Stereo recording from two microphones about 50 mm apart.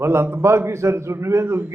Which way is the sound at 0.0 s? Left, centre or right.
Right.